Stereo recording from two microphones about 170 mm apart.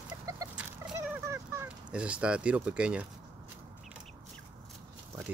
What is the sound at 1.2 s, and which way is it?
Speech, 15° right (ahead or behind).